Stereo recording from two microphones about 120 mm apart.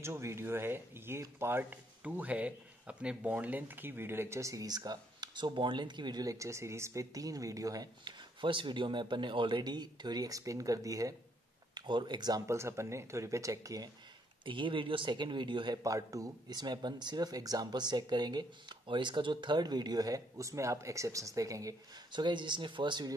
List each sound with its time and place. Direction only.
0.0 s speech: 20° right (ahead or behind)
12.4 s speech: 25° right (ahead or behind)
14.4 s speech: 45° right (ahead or behind)
15.8 s speech: 25° right (ahead or behind)